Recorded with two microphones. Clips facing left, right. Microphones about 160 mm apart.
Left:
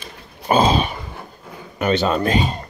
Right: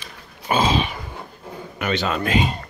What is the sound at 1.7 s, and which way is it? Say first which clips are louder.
Speech: left 5 dB; 35° left (ahead or behind).